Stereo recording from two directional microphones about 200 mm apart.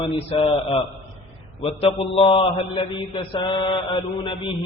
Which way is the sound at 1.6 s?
30° left (ahead or behind).